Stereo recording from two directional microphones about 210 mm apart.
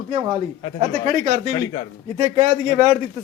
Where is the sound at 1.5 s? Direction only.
15° left (ahead or behind).